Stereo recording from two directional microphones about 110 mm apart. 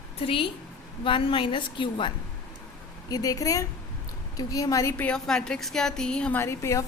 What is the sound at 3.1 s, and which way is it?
A woman's voice, 35° left (ahead or behind).